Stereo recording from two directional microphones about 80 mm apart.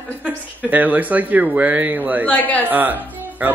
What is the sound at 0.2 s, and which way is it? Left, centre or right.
Speech, right.